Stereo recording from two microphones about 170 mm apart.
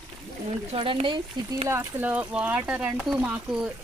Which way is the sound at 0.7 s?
35° right (ahead or behind).